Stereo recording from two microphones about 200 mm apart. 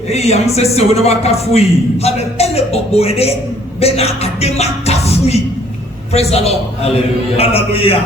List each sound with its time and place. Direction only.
0.1 s a man's voice: 30° left (ahead or behind)
3.8 s music: 30° left (ahead or behind)
6.1 s a man's voice: 30° left (ahead or behind)